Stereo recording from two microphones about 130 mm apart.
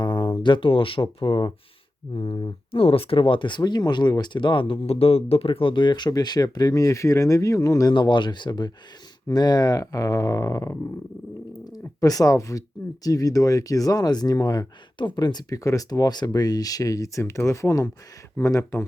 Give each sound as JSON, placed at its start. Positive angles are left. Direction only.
{"t": 0.0, "sound": "speech", "side_deg": 40}